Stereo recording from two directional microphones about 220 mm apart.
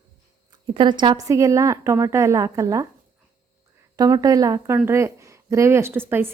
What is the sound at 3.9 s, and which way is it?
A woman's voice, 15° right (ahead or behind).